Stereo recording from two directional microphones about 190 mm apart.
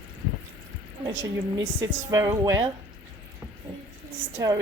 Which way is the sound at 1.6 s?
20° right (ahead or behind).